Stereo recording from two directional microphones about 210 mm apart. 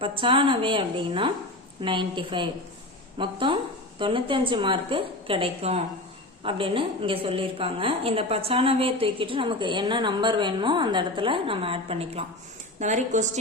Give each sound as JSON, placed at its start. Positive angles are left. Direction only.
{"t": 0.0, "sound": "a woman's voice", "side_deg": -25}